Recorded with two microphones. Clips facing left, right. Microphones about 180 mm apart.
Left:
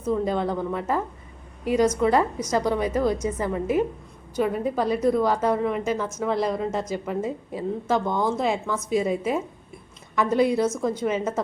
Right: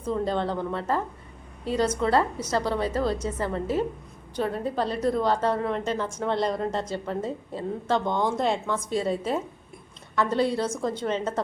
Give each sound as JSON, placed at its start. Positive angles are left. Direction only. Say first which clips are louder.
{"t": 0.0, "sound": "a woman's voice", "louder": "left 2 dB", "side_deg": 10}